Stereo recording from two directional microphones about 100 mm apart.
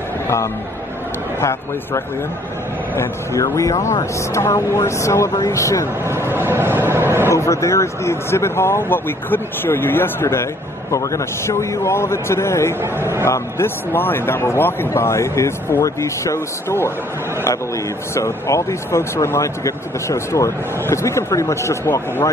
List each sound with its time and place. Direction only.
1.4 s speech: 30° left (ahead or behind)
6.0 s speech: 25° right (ahead or behind)
7.3 s speech: 30° left (ahead or behind)
18.1 s speech: 30° left (ahead or behind)